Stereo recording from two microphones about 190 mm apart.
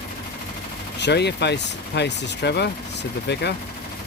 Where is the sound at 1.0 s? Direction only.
65° left (ahead or behind).